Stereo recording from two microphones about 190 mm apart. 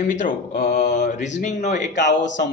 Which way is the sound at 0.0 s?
40° left (ahead or behind).